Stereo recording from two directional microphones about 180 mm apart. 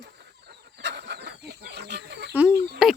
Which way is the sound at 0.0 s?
80° right.